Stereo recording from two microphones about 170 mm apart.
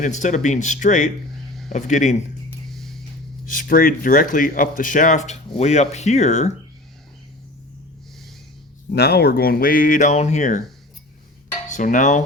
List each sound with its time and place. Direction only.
0.0 s speech: 45° left (ahead or behind)
3.4 s speech: 50° left (ahead or behind)
8.9 s speech: 70° left (ahead or behind); by 10.6 s 45° left (ahead or behind)
11.7 s speech: 50° left (ahead or behind)